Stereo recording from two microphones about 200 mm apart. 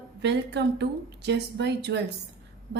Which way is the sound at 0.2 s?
60° right (ahead or behind).